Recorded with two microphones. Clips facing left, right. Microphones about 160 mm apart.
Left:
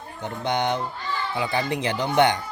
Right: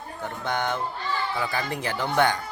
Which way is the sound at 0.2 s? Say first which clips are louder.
Left 3 dB; 20° left (ahead or behind).